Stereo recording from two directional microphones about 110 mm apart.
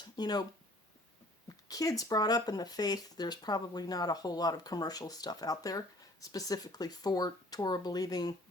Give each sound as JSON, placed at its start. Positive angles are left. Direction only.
{"t": 0.0, "sound": "speech", "side_deg": 40}
{"t": 1.5, "sound": "speech", "side_deg": 35}